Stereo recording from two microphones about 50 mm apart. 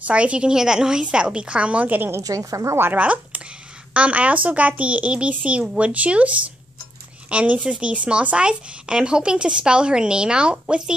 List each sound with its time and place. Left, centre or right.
0.0 s a woman's voice: right
2.3 s speech: right
3.0 s speech: right